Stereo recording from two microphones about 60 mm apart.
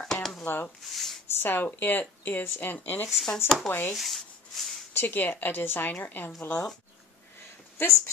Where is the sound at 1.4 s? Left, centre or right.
Left.